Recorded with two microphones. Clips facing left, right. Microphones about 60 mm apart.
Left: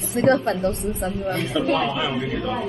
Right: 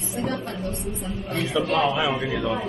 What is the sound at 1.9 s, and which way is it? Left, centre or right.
Speech, centre.